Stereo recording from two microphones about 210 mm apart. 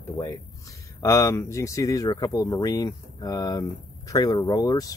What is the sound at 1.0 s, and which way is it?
Speech, 15° left (ahead or behind).